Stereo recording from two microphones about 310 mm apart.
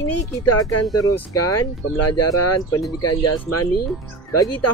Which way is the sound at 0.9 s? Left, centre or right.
Centre.